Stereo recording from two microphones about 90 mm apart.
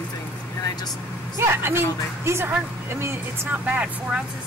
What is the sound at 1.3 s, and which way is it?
A woman's voice, 25° right (ahead or behind).